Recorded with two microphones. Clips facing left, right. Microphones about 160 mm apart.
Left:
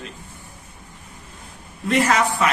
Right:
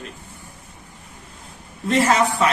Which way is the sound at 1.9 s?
30° right (ahead or behind).